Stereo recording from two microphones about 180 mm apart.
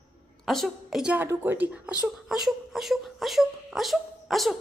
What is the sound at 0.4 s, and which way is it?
A woman's voice, centre (ahead or behind).